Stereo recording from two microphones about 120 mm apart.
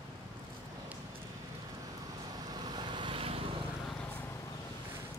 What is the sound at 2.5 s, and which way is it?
Vehicle, 35° right (ahead or behind).